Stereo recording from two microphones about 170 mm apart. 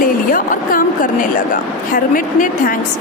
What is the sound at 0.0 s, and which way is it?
A woman's voice, 55° left (ahead or behind).